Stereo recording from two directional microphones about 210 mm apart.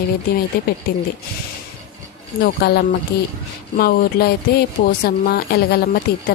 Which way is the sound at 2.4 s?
45° left (ahead or behind).